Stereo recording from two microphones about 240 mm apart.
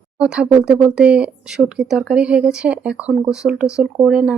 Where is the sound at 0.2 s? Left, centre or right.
Centre.